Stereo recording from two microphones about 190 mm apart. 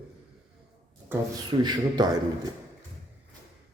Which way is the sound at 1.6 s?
20° right (ahead or behind).